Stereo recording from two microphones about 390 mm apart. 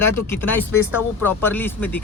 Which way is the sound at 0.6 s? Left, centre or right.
Left.